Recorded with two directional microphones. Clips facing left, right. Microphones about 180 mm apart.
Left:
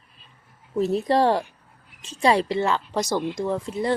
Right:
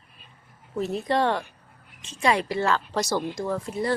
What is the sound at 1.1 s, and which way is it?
Speech, 35° left (ahead or behind).